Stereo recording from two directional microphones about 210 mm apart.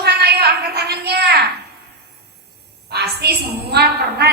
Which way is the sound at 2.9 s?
50° right (ahead or behind).